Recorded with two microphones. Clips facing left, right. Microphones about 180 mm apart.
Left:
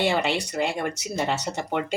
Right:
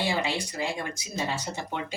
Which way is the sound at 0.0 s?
70° left (ahead or behind).